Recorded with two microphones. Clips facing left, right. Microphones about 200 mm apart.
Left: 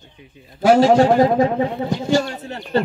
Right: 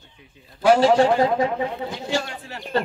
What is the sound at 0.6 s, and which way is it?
Speech, 45° left (ahead or behind).